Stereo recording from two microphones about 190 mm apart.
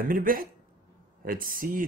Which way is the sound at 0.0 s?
45° right (ahead or behind).